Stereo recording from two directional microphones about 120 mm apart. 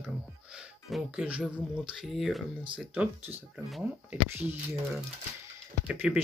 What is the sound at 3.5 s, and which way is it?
Speech, 10° right (ahead or behind).